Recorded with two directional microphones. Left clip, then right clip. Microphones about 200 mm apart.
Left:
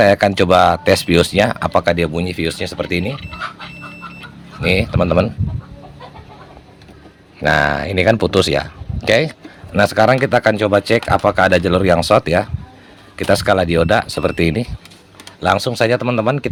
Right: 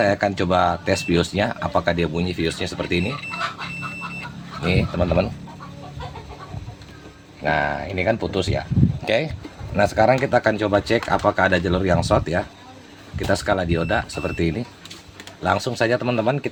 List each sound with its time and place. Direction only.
0.0 s speech: 40° left (ahead or behind)
4.6 s speech: 40° left (ahead or behind)
7.4 s speech: 45° left (ahead or behind)
9.0 s speech: 35° left (ahead or behind)